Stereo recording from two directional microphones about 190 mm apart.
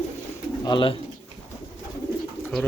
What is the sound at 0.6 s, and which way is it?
Speech, 25° left (ahead or behind).